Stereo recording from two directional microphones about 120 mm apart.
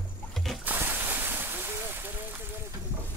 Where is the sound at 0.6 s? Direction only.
15° right (ahead or behind).